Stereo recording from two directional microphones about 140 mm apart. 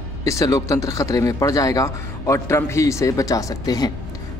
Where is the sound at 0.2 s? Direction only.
25° left (ahead or behind).